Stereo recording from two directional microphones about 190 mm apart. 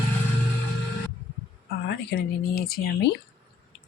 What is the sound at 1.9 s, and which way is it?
Speech, 55° left (ahead or behind).